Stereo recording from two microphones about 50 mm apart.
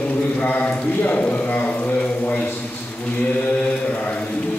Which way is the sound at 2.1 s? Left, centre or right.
Left.